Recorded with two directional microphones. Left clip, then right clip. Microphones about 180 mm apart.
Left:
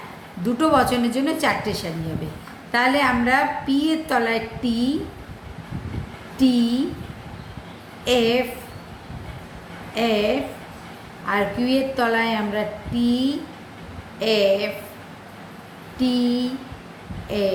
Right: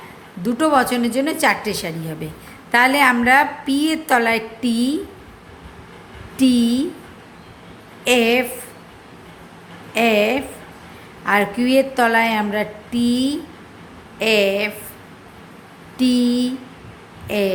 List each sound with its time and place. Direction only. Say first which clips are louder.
0.4 s a woman's voice: right 2 dB; 35° right (ahead or behind)
6.3 s a woman's voice: right 3 dB; 40° right (ahead or behind)
8.0 s a woman's voice: right 3 dB; 40° right (ahead or behind)
9.9 s a woman's voice: right 4 dB; 40° right (ahead or behind)
16.0 s a woman's voice: right 4 dB; 40° right (ahead or behind)